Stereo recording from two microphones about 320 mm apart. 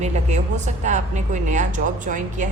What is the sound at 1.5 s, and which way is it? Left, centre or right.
Speech, right.